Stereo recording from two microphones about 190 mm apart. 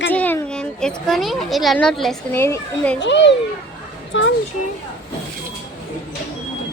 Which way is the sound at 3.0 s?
70° left (ahead or behind).